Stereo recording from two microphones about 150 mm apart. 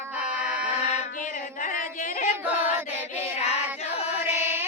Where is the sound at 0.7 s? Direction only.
50° left (ahead or behind).